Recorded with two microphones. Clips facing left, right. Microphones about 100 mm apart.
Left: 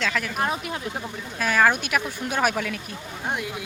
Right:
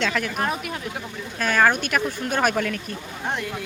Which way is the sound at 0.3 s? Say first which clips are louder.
Even; 20° left (ahead or behind).